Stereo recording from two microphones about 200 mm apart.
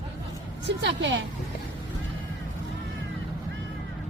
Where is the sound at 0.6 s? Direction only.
60° right (ahead or behind).